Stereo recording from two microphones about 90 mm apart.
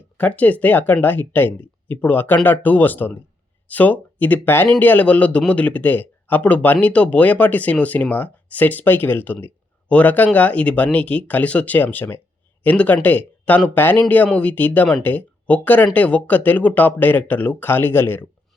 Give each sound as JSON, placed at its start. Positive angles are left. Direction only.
{"t": 0.2, "sound": "a man's voice", "side_deg": 15}